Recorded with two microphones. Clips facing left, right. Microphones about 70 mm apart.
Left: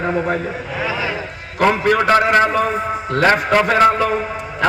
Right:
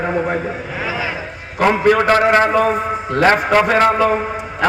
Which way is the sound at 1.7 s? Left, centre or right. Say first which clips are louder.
Right 2 dB; right.